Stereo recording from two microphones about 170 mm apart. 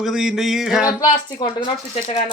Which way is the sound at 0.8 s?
25° left (ahead or behind).